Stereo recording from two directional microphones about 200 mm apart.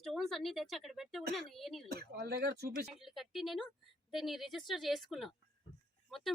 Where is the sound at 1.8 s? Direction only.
55° right (ahead or behind).